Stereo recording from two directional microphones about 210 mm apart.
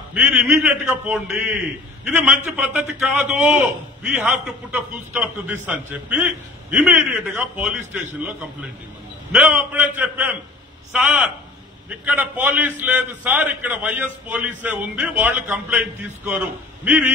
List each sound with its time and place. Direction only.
0.1 s a man's voice: 5° right (ahead or behind)